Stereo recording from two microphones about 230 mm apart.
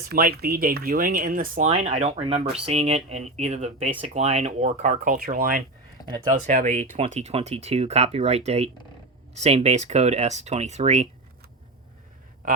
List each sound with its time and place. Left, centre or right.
0.1 s speech: right
6.0 s a sound: centre
6.4 s speech: right